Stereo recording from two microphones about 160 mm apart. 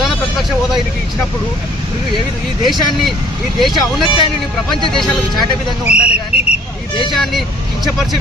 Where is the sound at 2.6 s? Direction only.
Centre (ahead or behind).